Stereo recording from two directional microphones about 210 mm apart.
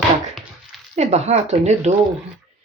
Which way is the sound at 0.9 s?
30° right (ahead or behind).